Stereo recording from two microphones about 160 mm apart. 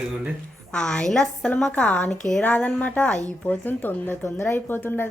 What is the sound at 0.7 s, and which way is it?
Speech, 5° left (ahead or behind).